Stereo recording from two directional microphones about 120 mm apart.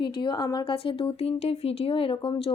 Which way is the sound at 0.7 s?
50° left (ahead or behind).